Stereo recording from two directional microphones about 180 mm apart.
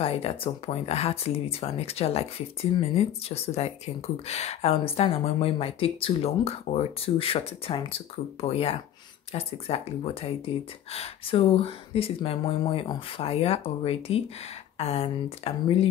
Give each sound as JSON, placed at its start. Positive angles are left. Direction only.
{"t": 0.0, "sound": "speech", "side_deg": 30}